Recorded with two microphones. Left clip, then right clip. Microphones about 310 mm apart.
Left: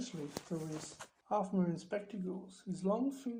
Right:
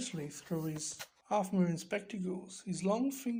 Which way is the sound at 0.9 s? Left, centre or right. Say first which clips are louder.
Right 2 dB; right.